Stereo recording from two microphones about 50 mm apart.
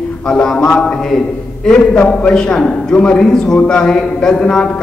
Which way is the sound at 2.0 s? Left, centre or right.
Centre.